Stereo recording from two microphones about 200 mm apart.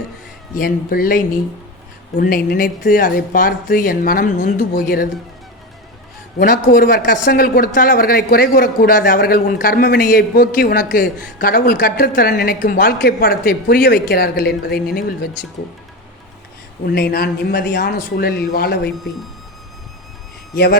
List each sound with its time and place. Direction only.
0.5 s a woman's voice: 45° left (ahead or behind)
6.4 s a woman's voice: 45° left (ahead or behind)
16.8 s a woman's voice: 50° left (ahead or behind)